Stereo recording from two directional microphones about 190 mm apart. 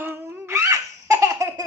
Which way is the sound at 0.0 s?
10° right (ahead or behind).